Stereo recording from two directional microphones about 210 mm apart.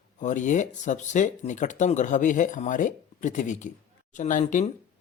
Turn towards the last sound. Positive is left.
turn(degrees=35)  # may be behind; listen again after turning